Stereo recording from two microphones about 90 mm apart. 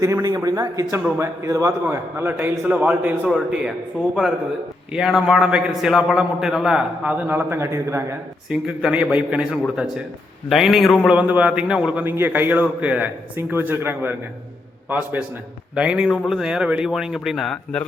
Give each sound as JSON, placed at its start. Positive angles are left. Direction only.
{"t": 0.0, "sound": "a man's voice", "side_deg": -35}
{"t": 7.1, "sound": "a man's voice", "side_deg": -20}
{"t": 8.4, "sound": "a man's voice", "side_deg": -5}
{"t": 11.1, "sound": "a man's voice", "side_deg": -15}